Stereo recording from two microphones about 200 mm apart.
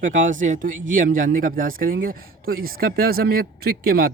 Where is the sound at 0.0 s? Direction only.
40° right (ahead or behind).